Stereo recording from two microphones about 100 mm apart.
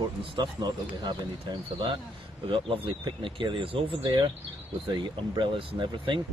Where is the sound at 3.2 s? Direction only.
55° right (ahead or behind).